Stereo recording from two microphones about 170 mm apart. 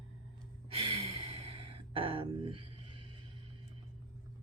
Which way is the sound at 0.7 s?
35° right (ahead or behind).